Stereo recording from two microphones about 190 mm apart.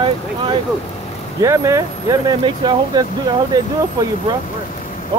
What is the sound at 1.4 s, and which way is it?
Speech, 15° right (ahead or behind).